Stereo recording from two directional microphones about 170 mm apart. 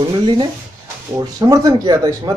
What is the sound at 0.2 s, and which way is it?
Speech, 30° right (ahead or behind).